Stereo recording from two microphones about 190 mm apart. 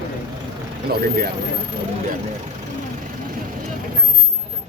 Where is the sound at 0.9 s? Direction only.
55° right (ahead or behind).